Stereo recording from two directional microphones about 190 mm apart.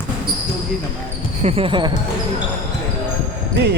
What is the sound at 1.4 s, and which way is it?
Speech, 30° right (ahead or behind).